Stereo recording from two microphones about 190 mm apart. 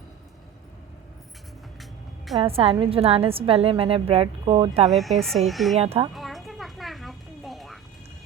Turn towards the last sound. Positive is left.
turn(degrees=0)  # may be behind; listen again after turning